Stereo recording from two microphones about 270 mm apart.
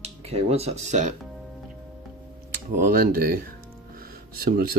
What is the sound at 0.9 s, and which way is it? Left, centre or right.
Speech, right.